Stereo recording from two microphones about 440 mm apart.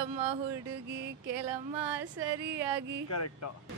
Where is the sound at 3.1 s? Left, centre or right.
Left.